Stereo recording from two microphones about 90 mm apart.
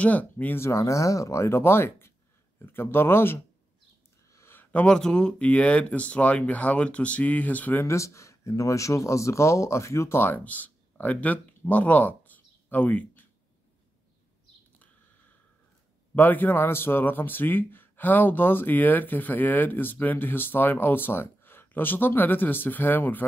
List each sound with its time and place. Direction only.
0.0 s speech: 15° left (ahead or behind)
0.6 s a man's voice: 35° left (ahead or behind)
4.3 s a sound: 30° left (ahead or behind)
4.8 s speech: 10° left (ahead or behind)
7.8 s speech: 35° left (ahead or behind); by 13.3 s 20° left (ahead or behind)
16.2 s a man's voice: 20° left (ahead or behind)